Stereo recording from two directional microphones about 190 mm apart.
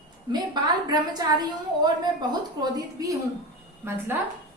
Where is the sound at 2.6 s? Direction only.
20° right (ahead or behind).